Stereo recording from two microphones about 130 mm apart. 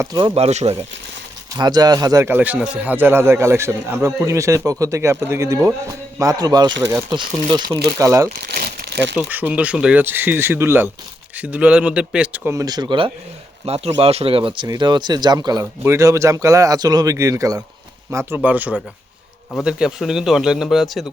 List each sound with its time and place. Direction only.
0.0 s a man's voice: 25° right (ahead or behind)
0.3 s speech: 50° right (ahead or behind)
1.5 s a man's voice: 30° right (ahead or behind)
7.3 s speech: 75° right (ahead or behind)
7.7 s a man's voice: 25° right (ahead or behind)
9.1 s speech: 10° right (ahead or behind)
12.5 s speech: 25° right (ahead or behind)
13.7 s speech: 50° right (ahead or behind); by 15.6 s 30° right (ahead or behind)
15.8 s a man's voice: 20° right (ahead or behind); by 21.1 s centre (ahead or behind)